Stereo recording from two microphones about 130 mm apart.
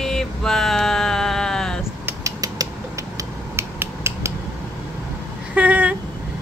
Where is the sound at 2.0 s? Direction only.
25° right (ahead or behind).